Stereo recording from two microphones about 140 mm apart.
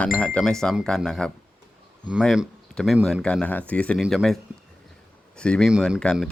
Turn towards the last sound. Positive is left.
turn(degrees=5)  # may be behind; listen again after turning